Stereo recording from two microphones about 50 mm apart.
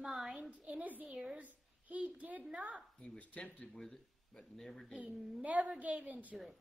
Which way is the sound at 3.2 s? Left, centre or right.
Left.